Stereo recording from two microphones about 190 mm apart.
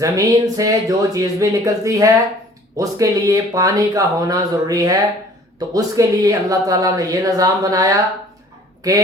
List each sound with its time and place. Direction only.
0.0 s speech: 20° right (ahead or behind)